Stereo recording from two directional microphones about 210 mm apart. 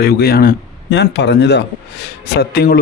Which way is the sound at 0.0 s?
50° left (ahead or behind).